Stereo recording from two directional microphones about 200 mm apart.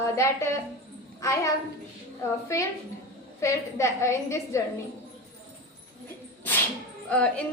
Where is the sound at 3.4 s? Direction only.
15° left (ahead or behind).